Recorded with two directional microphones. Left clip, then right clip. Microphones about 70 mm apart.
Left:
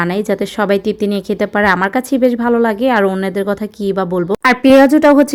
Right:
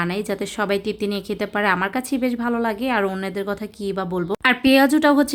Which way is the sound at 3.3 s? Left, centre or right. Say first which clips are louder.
Left 8 dB; left.